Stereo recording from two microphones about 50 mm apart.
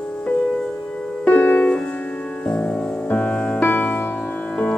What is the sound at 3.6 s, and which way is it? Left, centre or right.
Music, left.